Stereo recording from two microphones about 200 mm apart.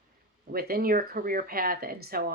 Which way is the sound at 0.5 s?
50° right (ahead or behind).